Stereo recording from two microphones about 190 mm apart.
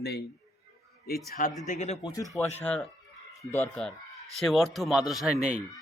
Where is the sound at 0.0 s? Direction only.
60° left (ahead or behind).